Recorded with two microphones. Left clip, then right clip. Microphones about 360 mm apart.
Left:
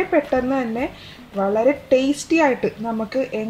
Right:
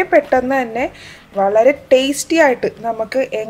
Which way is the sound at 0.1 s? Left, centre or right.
Right.